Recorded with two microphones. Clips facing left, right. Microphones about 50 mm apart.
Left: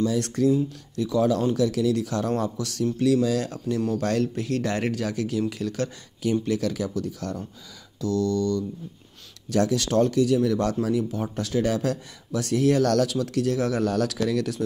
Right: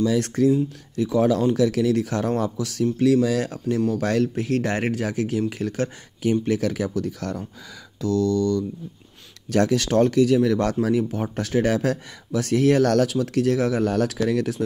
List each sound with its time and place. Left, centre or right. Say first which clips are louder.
0.5 s speech: right 2 dB; right
1.5 s speech: right 3 dB; right